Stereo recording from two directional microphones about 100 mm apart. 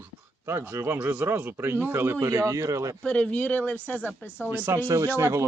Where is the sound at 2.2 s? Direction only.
35° right (ahead or behind).